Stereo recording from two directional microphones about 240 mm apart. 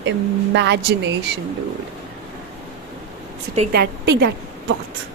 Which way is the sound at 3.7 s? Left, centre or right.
Right.